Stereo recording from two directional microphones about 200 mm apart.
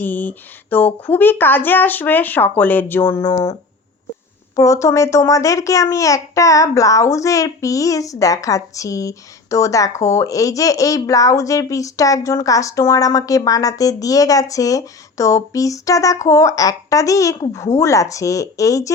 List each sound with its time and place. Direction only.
0.0 s a child's voice: 10° left (ahead or behind)
4.5 s a child's voice: 15° left (ahead or behind)